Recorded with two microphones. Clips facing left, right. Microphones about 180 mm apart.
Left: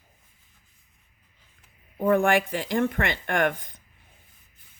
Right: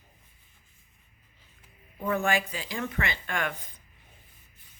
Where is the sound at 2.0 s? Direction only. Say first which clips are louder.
Left 7 dB; 55° left (ahead or behind).